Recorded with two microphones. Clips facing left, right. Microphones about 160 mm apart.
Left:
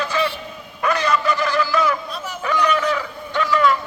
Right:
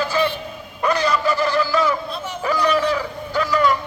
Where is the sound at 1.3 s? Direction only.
30° right (ahead or behind).